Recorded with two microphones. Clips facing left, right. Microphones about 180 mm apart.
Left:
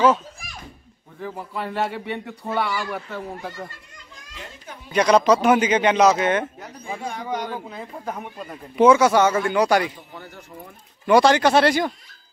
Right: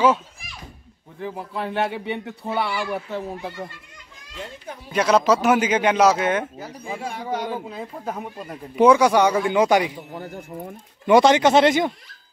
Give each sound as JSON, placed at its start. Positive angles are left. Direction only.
{"t": 1.2, "sound": "speech", "side_deg": -20}
{"t": 4.8, "sound": "a man's voice", "side_deg": -5}
{"t": 10.1, "sound": "speech", "side_deg": -45}
{"t": 11.1, "sound": "speech", "side_deg": -20}